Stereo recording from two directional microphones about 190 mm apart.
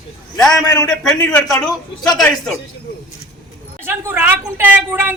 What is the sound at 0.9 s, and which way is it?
A man's voice, 5° left (ahead or behind).